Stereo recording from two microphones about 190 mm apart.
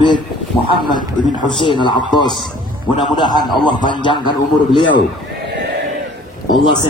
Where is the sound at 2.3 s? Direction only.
Centre (ahead or behind).